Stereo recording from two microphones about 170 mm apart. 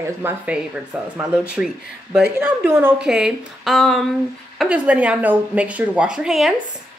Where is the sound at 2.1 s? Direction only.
5° right (ahead or behind).